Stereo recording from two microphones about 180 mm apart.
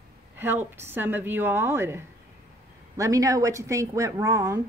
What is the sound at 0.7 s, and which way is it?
A woman's voice, 10° right (ahead or behind).